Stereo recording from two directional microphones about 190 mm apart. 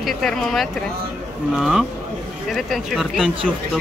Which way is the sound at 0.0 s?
Centre (ahead or behind).